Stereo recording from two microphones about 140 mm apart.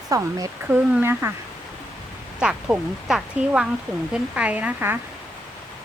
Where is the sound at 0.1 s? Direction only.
25° right (ahead or behind).